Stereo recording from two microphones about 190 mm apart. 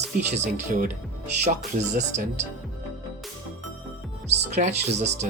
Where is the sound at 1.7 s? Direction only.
40° right (ahead or behind).